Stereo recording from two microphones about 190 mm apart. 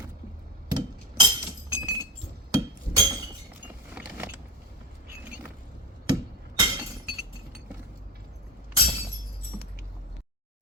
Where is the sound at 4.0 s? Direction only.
5° right (ahead or behind).